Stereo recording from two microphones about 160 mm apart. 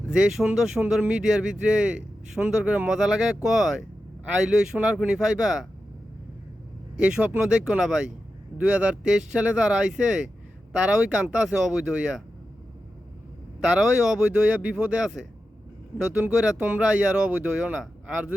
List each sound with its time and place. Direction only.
0.1 s speech: 5° right (ahead or behind)
6.9 s speech: 5° right (ahead or behind)
13.6 s speech: 5° right (ahead or behind)